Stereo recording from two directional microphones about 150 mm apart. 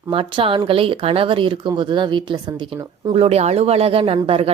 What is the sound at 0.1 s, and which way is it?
A woman's voice, 35° right (ahead or behind).